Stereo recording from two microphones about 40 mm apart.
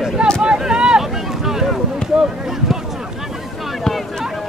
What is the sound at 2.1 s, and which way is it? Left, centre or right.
Speech, centre.